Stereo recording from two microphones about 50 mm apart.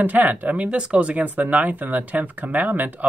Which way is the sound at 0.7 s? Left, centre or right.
Right.